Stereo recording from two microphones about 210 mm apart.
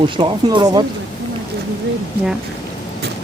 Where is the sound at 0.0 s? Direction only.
20° right (ahead or behind).